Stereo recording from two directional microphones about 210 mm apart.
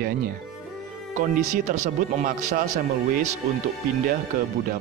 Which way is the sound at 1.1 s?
40° right (ahead or behind).